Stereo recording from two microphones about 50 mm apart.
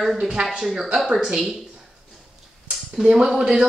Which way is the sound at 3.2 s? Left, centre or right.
Centre.